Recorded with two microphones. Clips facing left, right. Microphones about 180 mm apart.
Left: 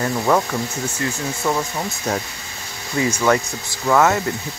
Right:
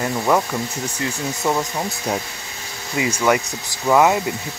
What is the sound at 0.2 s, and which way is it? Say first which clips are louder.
Speech: even; 5° right (ahead or behind).